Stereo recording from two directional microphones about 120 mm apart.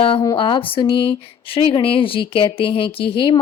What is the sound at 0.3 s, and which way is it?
Speech, 45° left (ahead or behind).